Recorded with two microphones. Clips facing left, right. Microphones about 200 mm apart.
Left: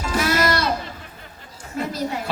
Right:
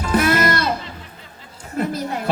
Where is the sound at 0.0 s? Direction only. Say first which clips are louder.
Right 3 dB; 55° right (ahead or behind).